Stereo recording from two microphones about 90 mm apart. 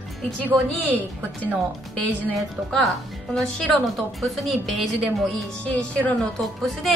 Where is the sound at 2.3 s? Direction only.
Centre (ahead or behind).